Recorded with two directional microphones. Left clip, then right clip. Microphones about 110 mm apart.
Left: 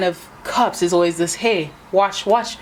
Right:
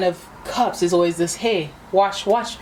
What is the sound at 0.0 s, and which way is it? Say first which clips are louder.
A woman's voice: left 1 dB; 45° left (ahead or behind).